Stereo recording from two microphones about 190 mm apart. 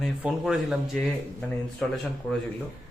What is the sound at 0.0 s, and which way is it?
Speech, centre (ahead or behind).